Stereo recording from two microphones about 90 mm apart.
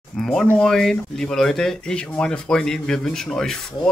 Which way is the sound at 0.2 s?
5° left (ahead or behind).